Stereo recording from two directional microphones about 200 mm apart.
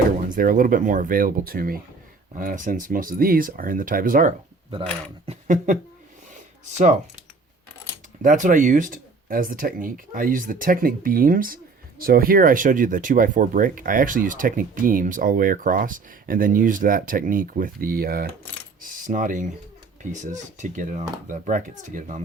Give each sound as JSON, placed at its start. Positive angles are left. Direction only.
{"t": 0.3, "sound": "speech", "side_deg": -45}
{"t": 6.3, "sound": "a sound", "side_deg": -35}
{"t": 8.2, "sound": "speech", "side_deg": -40}
{"t": 18.8, "sound": "coin", "side_deg": -40}
{"t": 20.0, "sound": "speech", "side_deg": -40}